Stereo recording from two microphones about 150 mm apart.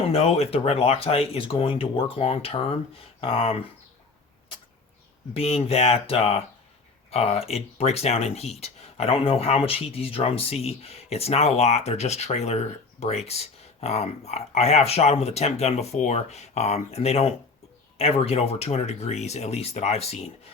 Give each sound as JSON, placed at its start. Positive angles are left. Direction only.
{"t": 0.0, "sound": "speech", "side_deg": 40}
{"t": 5.3, "sound": "speech", "side_deg": 40}